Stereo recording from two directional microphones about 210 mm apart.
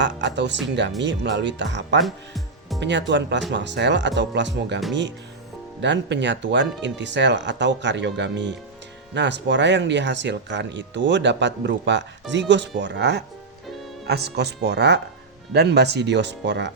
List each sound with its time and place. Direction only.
0.0 s speech: 55° right (ahead or behind)
2.0 s music: centre (ahead or behind)
2.8 s speech: 55° right (ahead or behind)
5.8 s speech: 55° right (ahead or behind)